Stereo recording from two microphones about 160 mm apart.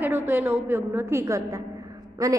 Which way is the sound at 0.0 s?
15° right (ahead or behind).